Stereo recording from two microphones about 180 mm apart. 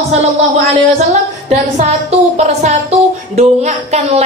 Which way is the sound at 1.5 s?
35° right (ahead or behind).